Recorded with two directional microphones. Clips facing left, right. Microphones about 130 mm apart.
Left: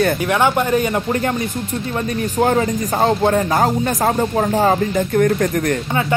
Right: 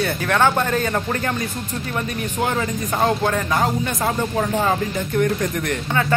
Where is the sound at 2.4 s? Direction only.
40° left (ahead or behind).